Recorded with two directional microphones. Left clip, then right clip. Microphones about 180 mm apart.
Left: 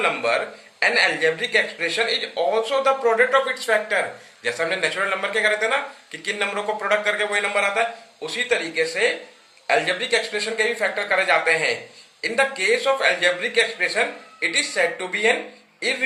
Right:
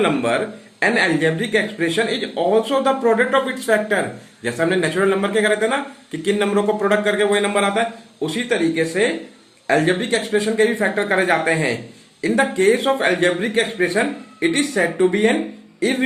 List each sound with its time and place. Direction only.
0.0 s speech: 35° right (ahead or behind)